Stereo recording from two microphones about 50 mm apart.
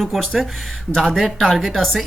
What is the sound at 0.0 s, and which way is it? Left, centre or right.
Speech, centre.